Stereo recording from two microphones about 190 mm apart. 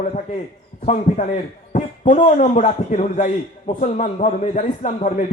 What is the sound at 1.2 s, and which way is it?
A man's voice, 45° left (ahead or behind).